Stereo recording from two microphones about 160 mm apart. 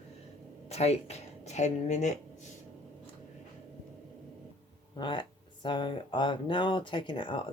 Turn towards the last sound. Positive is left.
turn(degrees=30)  # may be behind; listen again after turning